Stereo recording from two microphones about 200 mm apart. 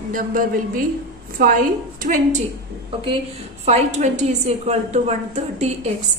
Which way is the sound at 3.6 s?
35° right (ahead or behind).